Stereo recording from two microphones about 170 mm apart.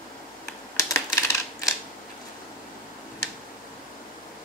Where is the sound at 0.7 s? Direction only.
15° left (ahead or behind).